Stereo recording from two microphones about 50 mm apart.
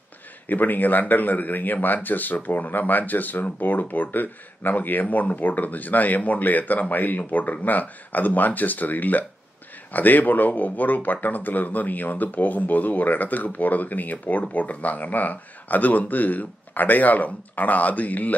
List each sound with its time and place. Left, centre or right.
0.5 s speech: left